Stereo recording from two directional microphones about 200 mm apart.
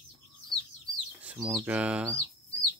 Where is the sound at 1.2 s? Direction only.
5° right (ahead or behind).